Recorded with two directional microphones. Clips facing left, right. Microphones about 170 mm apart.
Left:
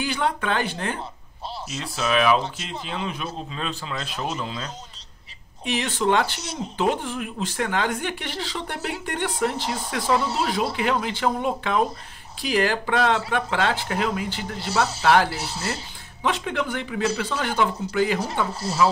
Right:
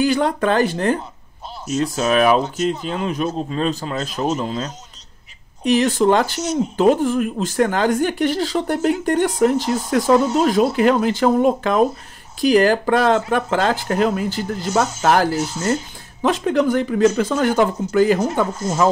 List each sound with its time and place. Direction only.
0.0 s speech: 40° right (ahead or behind)
18.5 s speech: 35° left (ahead or behind)